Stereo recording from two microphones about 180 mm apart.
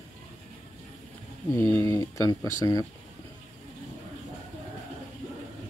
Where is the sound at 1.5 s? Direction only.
15° left (ahead or behind).